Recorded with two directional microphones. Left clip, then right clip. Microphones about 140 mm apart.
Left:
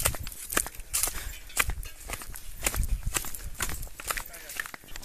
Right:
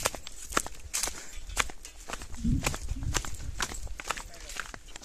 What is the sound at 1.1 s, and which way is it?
Walk, 5° right (ahead or behind).